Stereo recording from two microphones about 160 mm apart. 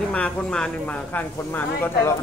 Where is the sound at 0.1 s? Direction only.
5° left (ahead or behind).